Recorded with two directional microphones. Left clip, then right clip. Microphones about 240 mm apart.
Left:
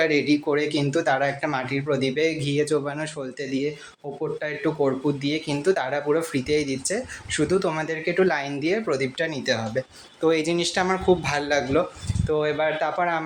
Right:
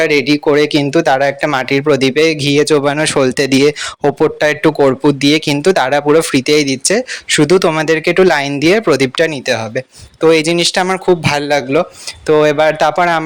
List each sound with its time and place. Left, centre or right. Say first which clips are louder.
0.0 s speech: right 10 dB; right